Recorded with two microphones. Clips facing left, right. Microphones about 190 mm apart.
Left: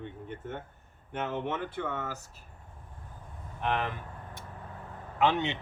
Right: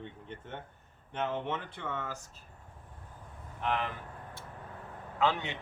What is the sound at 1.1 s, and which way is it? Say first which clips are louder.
Speech: left 1 dB; 5° left (ahead or behind).